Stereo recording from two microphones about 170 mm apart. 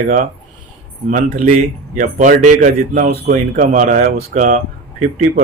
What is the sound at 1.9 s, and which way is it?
Speech, 50° right (ahead or behind).